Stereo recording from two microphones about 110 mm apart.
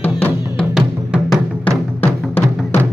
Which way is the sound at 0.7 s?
Centre (ahead or behind).